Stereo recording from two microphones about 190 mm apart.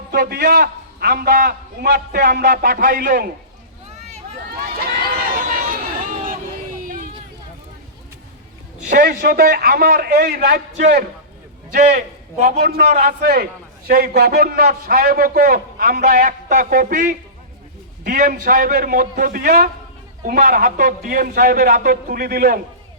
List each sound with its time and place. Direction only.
0.1 s a man's voice: 55° right (ahead or behind)
4.6 s run: 50° right (ahead or behind)
6.8 s a sound: 45° right (ahead or behind)
8.9 s a man's voice: 50° right (ahead or behind)
12.4 s a man's voice: 55° right (ahead or behind)
12.9 s a man's voice: 50° right (ahead or behind)